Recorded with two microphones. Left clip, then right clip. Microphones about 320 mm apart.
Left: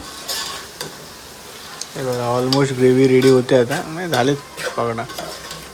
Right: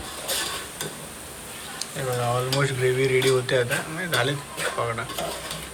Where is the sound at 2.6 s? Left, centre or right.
Centre.